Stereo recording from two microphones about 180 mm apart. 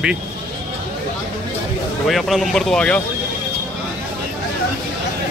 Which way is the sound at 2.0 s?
Centre (ahead or behind).